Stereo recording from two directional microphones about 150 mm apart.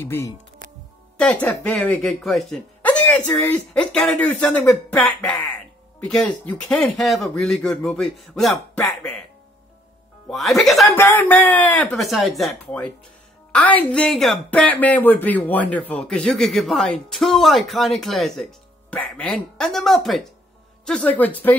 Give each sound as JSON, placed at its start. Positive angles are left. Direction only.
{"t": 0.0, "sound": "speech", "side_deg": 15}
{"t": 10.2, "sound": "speech", "side_deg": 0}
{"t": 11.0, "sound": "speech", "side_deg": 15}